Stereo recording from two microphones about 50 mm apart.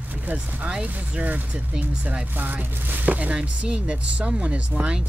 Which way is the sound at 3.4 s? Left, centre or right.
Centre.